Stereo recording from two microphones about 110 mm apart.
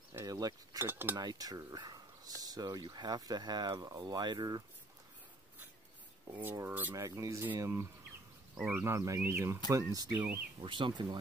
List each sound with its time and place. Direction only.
0.2 s speech: 35° right (ahead or behind)
0.8 s cutlery: 20° right (ahead or behind)
1.1 s speech: 35° right (ahead or behind)
6.4 s speech: 20° right (ahead or behind)
7.0 s speech: 30° right (ahead or behind)
8.5 s speech: 10° right (ahead or behind)
8.8 s speech: 25° right (ahead or behind)
10.6 s speech: 45° right (ahead or behind)